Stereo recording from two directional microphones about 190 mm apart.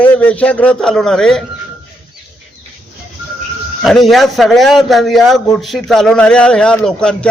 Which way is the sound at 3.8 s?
Centre (ahead or behind).